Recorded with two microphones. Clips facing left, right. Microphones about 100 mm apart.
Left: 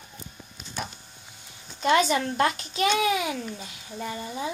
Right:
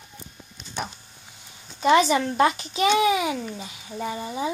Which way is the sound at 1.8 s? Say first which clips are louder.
Right 3 dB; 5° right (ahead or behind).